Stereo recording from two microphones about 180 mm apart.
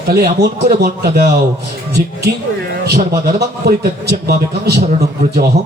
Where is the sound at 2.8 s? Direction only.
60° right (ahead or behind).